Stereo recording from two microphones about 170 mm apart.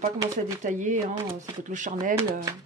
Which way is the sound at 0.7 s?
45° right (ahead or behind).